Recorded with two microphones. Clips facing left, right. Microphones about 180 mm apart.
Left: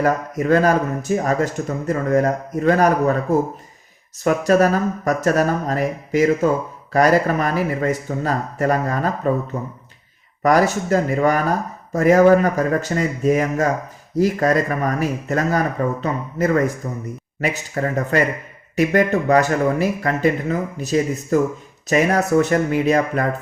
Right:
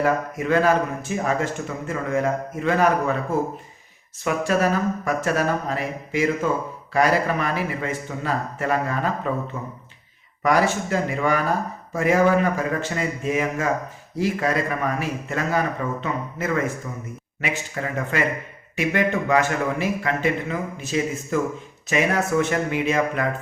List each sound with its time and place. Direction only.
0.0 s speech: 40° left (ahead or behind)